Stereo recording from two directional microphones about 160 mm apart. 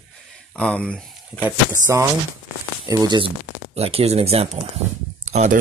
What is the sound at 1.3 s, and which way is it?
Speech, 10° right (ahead or behind).